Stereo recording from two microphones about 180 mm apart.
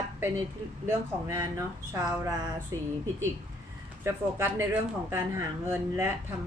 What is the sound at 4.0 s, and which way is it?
Speech, 15° right (ahead or behind).